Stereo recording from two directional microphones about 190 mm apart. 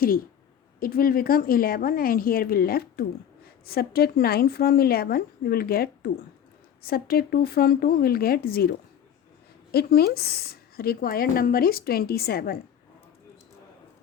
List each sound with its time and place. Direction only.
0.8 s a woman's voice: 50° left (ahead or behind)
9.7 s a woman's voice: 55° left (ahead or behind)